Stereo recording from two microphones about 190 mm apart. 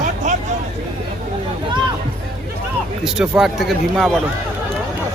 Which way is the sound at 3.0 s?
5° right (ahead or behind).